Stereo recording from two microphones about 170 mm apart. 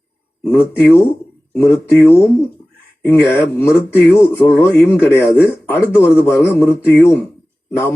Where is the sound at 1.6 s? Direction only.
15° left (ahead or behind).